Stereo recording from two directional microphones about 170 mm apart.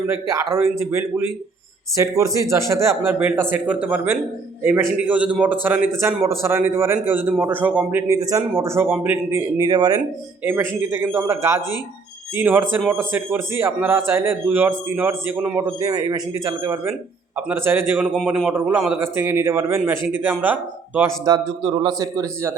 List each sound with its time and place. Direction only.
0.1 s a man's voice: 15° right (ahead or behind)
12.9 s a man's voice: 10° right (ahead or behind)
21.2 s speech: 30° right (ahead or behind)